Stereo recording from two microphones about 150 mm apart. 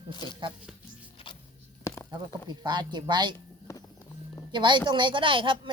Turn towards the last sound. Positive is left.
turn(degrees=-35)  # may be behind; listen again after turning